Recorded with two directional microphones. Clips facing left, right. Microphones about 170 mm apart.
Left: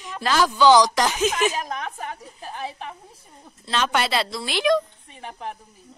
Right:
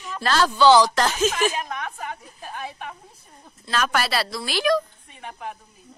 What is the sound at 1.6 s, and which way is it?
A woman's voice, 30° left (ahead or behind).